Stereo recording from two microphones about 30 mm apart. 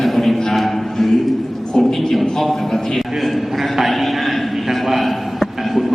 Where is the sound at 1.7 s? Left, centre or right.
Centre.